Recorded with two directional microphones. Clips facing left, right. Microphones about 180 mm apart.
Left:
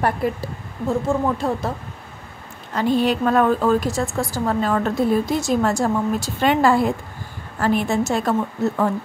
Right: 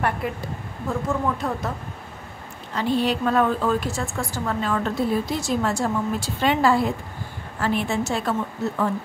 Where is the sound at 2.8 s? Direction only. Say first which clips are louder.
Left 4 dB; 50° left (ahead or behind).